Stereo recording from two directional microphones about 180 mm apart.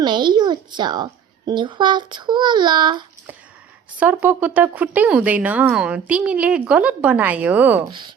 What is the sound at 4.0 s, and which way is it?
Speech, 10° right (ahead or behind).